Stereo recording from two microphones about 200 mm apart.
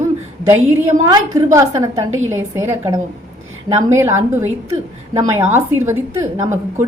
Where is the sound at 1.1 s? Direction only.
15° right (ahead or behind).